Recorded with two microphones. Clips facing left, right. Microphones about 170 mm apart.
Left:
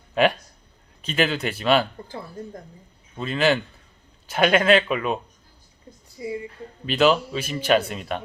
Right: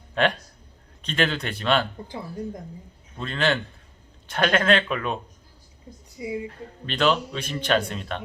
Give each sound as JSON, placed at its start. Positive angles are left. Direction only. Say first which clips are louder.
{"t": 0.1, "sound": "a man's voice", "louder": "left 3 dB", "side_deg": 5}
{"t": 3.2, "sound": "a man's voice", "louder": "left 4 dB", "side_deg": 5}
{"t": 6.1, "sound": "speech", "louder": "even", "side_deg": -15}
{"t": 6.8, "sound": "a man's voice", "louder": "left 4 dB", "side_deg": 5}